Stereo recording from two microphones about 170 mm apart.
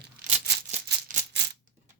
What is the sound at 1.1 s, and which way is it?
Rattle, 50° right (ahead or behind).